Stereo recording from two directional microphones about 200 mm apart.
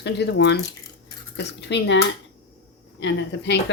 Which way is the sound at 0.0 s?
60° left (ahead or behind).